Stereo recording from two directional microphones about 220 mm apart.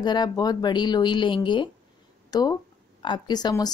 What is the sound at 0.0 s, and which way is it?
A woman's voice, 20° left (ahead or behind).